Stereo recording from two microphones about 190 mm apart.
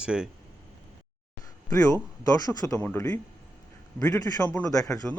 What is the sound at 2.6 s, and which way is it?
A man's voice, 10° left (ahead or behind).